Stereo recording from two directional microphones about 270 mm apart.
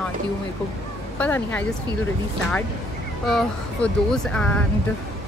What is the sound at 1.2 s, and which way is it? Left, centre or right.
Speech, centre.